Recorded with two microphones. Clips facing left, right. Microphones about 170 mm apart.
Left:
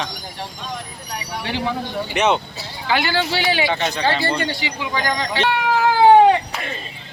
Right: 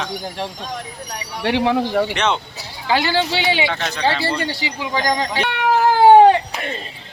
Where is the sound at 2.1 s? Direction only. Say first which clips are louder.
Left 2 dB; 5° left (ahead or behind).